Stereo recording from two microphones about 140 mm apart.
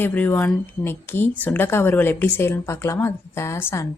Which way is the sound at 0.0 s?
15° left (ahead or behind).